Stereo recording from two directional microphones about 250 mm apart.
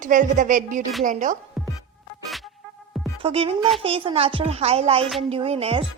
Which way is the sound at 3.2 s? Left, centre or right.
Right.